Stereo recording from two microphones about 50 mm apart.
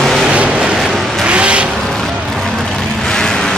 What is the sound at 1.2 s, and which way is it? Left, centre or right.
Vehicle, right.